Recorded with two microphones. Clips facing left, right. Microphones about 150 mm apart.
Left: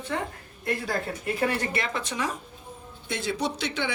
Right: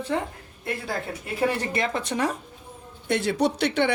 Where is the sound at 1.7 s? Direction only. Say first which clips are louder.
Right 4 dB; 50° right (ahead or behind).